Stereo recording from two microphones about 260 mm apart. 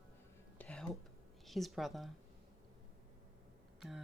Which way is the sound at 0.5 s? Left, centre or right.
Centre.